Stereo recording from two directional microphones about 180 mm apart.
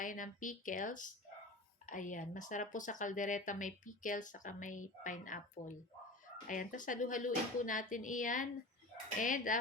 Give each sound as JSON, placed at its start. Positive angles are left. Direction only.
{"t": 0.0, "sound": "speech", "side_deg": 45}